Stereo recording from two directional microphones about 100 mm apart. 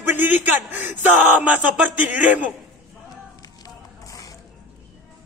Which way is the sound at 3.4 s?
35° left (ahead or behind).